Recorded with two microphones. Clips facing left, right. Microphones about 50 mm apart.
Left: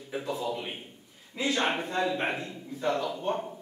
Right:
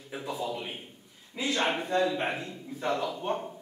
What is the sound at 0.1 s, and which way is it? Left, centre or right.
Speech, centre.